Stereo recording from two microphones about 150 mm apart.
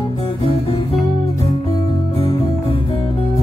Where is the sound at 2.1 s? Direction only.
40° left (ahead or behind).